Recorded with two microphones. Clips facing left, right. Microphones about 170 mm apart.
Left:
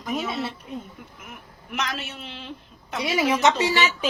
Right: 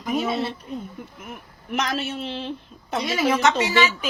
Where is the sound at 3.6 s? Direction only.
30° left (ahead or behind).